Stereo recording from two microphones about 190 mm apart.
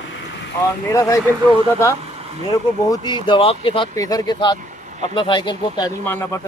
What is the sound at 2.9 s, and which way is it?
Speech, 25° left (ahead or behind).